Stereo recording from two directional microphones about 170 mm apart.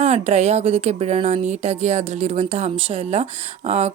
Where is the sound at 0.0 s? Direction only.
40° right (ahead or behind).